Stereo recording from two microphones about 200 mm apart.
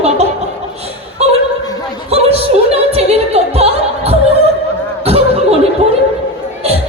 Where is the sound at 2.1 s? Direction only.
30° right (ahead or behind).